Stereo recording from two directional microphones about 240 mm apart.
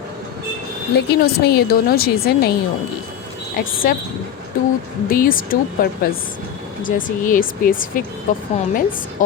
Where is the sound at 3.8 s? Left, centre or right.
Left.